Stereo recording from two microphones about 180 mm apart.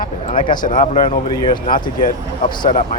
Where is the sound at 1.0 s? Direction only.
25° left (ahead or behind).